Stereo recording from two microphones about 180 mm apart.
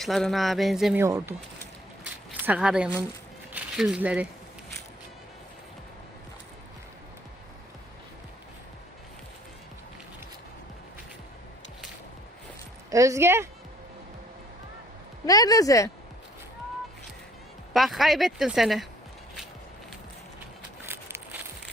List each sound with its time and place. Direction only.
0.0 s speech: centre (ahead or behind)
0.9 s speech: 15° right (ahead or behind)
12.9 s speech: 15° right (ahead or behind)
15.3 s speech: 20° left (ahead or behind)
17.7 s speech: centre (ahead or behind)
20.8 s a sound: 10° right (ahead or behind)